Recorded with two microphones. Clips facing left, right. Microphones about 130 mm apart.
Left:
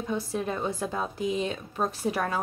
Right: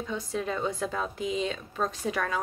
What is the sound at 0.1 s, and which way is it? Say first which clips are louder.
Speech: left 2 dB; 10° left (ahead or behind).